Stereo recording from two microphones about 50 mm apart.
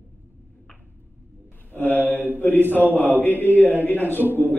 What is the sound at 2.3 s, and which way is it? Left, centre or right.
A man's voice, left.